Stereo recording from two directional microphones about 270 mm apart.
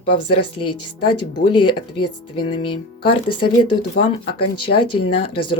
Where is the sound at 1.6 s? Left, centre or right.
Left.